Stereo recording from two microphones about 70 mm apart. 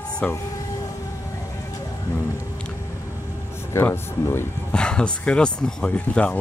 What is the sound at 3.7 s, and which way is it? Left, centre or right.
Speech, left.